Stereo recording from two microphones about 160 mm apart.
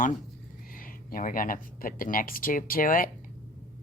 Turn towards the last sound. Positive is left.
turn(degrees=60)  # may be behind; listen again after turning